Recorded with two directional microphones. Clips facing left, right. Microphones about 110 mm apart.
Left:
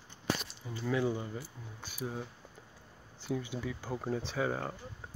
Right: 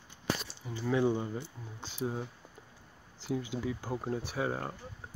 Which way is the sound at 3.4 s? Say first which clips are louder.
Right 3 dB; 20° right (ahead or behind).